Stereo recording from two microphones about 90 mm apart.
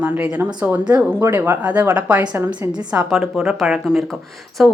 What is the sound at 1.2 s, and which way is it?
A woman's voice, 25° right (ahead or behind).